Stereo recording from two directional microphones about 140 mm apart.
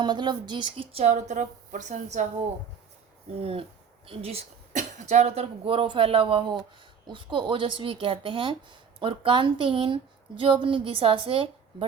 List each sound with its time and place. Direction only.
0.0 s a woman's voice: 30° right (ahead or behind)
1.0 s a woman's voice: 55° right (ahead or behind)
3.4 s speech: 40° right (ahead or behind)
4.7 s a woman's voice: 60° right (ahead or behind); by 11.9 s 40° right (ahead or behind)